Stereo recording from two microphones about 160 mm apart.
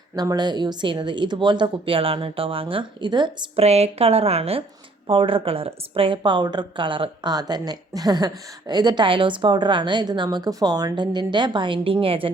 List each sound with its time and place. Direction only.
0.2 s speech: 25° right (ahead or behind)
3.6 s a woman's voice: 40° right (ahead or behind)